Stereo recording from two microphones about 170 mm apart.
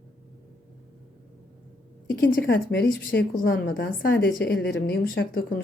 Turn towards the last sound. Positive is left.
turn(degrees=60)  # may be behind; listen again after turning